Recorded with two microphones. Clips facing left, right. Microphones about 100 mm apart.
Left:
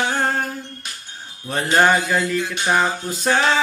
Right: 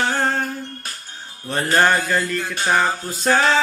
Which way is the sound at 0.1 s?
5° left (ahead or behind).